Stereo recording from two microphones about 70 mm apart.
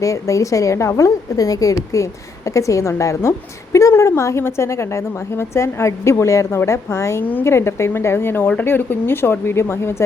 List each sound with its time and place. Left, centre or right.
0.0 s a woman's voice: left